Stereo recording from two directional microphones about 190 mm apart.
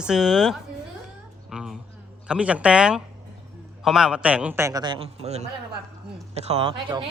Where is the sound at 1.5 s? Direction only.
5° right (ahead or behind).